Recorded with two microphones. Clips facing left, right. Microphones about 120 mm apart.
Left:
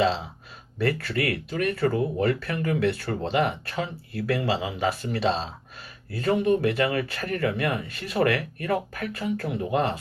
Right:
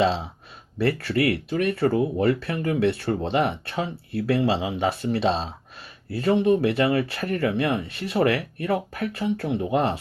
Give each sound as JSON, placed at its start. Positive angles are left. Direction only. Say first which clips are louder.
{"t": 0.8, "sound": "speech", "louder": "right 3 dB", "side_deg": -30}